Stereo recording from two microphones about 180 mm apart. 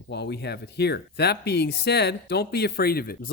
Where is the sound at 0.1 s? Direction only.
70° left (ahead or behind).